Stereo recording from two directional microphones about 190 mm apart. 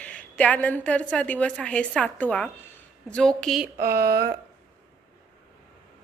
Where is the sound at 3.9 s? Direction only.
55° right (ahead or behind).